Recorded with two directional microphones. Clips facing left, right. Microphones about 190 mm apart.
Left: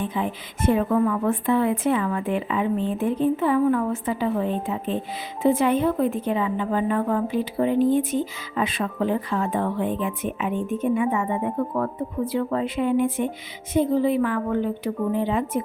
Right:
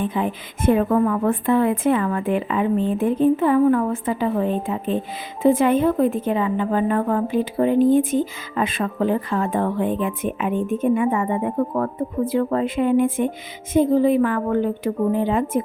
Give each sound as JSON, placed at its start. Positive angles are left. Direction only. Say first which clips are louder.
{"t": 0.1, "sound": "a woman's voice", "louder": "right 3 dB", "side_deg": -55}